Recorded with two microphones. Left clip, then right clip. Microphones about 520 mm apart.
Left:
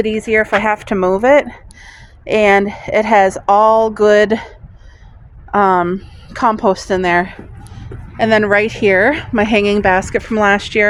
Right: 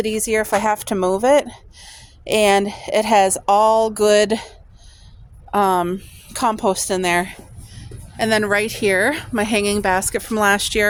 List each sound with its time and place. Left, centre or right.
0.0 s a woman's voice: right